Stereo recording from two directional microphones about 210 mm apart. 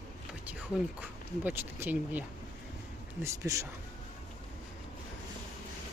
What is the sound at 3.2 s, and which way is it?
Speech, 15° right (ahead or behind).